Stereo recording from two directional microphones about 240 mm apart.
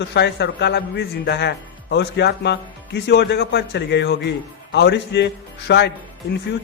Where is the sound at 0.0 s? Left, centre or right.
Left.